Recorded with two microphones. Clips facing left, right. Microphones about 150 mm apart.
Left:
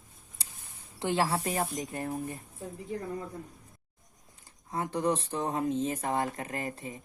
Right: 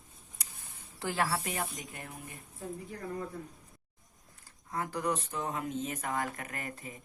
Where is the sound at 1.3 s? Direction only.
40° left (ahead or behind).